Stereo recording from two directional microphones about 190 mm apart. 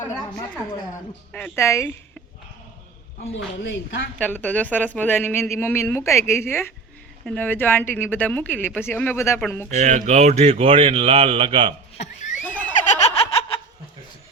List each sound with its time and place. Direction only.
1.3 s speech: 10° left (ahead or behind)
3.3 s speech: 70° left (ahead or behind)
4.2 s speech: 10° left (ahead or behind)
9.6 s speech: 40° right (ahead or behind)
11.9 s a sound: 40° left (ahead or behind)
12.8 s snicker: 35° left (ahead or behind)